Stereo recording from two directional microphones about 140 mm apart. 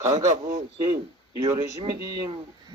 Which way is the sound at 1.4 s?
25° right (ahead or behind).